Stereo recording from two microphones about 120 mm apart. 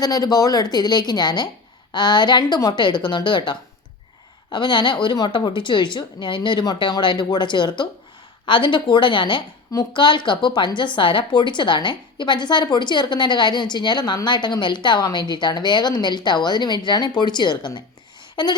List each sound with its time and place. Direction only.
0.0 s a woman's voice: 30° left (ahead or behind)